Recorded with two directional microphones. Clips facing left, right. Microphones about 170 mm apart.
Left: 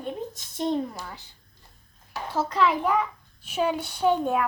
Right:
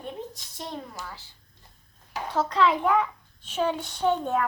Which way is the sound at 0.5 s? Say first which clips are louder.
Left 12 dB; 20° left (ahead or behind).